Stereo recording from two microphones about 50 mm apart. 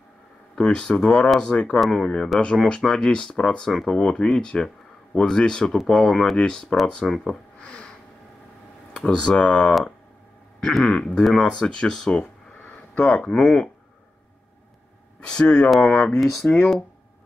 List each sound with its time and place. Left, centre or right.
0.6 s speech: centre
6.7 s speech: left
7.6 s a sound: centre
8.9 s speech: centre
10.9 s speech: centre
11.6 s speech: centre
15.1 s speech: centre